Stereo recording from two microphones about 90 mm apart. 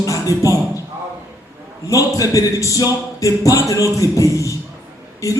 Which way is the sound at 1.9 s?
40° left (ahead or behind).